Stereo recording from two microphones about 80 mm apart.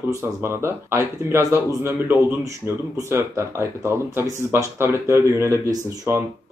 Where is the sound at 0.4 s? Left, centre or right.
Right.